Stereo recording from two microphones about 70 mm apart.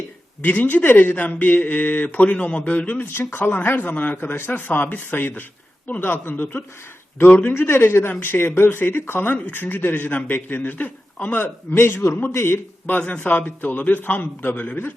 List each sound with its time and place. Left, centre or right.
0.4 s speech: left
11.7 s speech: left
12.9 s speech: left